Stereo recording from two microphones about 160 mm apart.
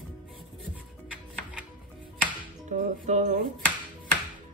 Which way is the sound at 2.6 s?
50° right (ahead or behind).